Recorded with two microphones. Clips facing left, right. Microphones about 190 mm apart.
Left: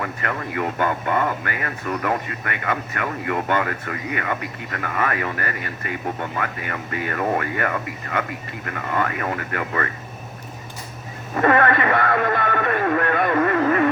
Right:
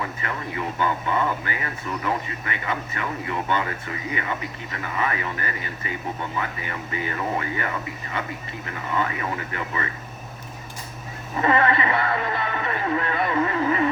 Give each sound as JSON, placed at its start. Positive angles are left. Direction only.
{"t": 0.0, "sound": "speech", "side_deg": 60}
{"t": 11.3, "sound": "speech", "side_deg": 55}